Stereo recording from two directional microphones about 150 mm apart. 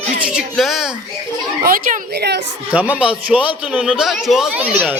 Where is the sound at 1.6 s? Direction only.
80° right.